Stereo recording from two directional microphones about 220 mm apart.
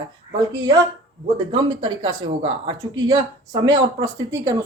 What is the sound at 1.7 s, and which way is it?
Speech, 20° right (ahead or behind).